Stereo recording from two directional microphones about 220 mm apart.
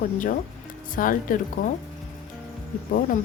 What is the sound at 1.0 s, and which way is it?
Speech, 40° left (ahead or behind).